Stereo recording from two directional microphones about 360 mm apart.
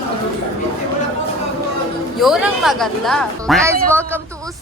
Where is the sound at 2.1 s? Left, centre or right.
Centre.